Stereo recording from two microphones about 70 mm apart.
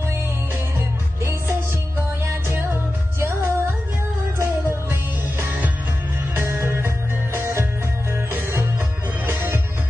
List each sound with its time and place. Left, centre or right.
0.7 s music: right
6.3 s music: right
8.3 s music: right